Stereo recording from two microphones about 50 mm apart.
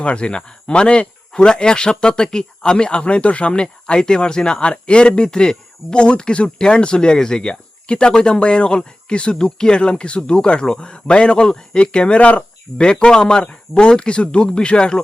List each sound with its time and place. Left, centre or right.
0.0 s speech: left